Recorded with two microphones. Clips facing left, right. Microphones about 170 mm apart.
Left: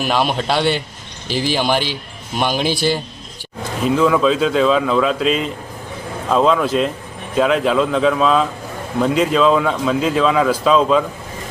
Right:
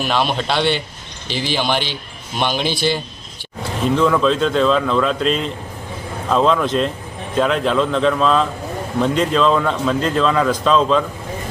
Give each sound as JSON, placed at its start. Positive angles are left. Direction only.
{"t": 0.0, "sound": "a man's voice", "side_deg": 5}
{"t": 2.7, "sound": "a man's voice", "side_deg": 40}
{"t": 3.8, "sound": "speech", "side_deg": 5}